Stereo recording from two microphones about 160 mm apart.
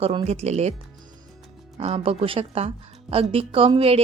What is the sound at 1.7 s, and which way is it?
A woman's voice, 35° right (ahead or behind).